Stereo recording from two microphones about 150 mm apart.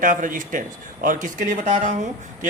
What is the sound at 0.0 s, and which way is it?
A man's voice, 60° right (ahead or behind).